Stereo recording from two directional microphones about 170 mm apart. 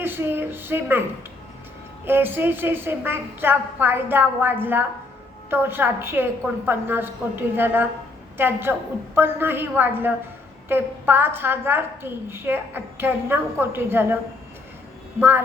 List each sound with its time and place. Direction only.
0.0 s a woman's voice: 15° right (ahead or behind)
2.0 s a woman's voice: 10° right (ahead or behind)
15.2 s a woman's voice: 15° right (ahead or behind)